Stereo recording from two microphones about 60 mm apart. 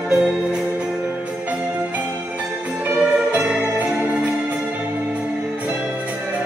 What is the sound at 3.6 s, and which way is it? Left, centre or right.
Music, right.